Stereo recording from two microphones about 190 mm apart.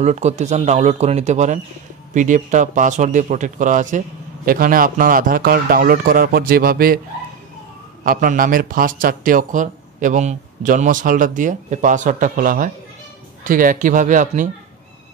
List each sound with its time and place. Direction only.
0.0 s a man's voice: 35° right (ahead or behind)
8.0 s a man's voice: 45° right (ahead or behind)